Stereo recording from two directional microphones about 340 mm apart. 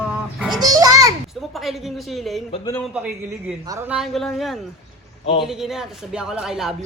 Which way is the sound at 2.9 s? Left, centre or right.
Centre.